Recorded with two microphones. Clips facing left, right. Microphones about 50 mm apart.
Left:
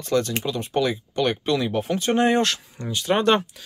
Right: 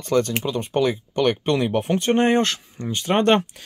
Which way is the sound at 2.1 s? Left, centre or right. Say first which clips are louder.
Right 1 dB; right.